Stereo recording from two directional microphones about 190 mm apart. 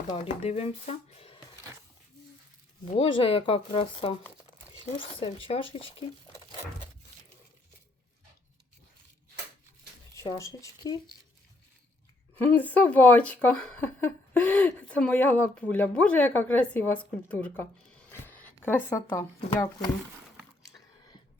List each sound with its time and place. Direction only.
0.1 s speech: 35° left (ahead or behind)
2.8 s speech: 30° left (ahead or behind)
10.2 s speech: 15° left (ahead or behind)
12.4 s speech: 10° left (ahead or behind)
18.1 s a sound: 10° left (ahead or behind)